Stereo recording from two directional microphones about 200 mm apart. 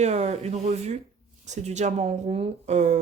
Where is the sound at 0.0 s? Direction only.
35° right (ahead or behind).